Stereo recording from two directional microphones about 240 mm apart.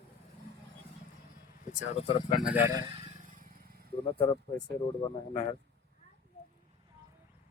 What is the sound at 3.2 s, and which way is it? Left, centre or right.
Vehicle, right.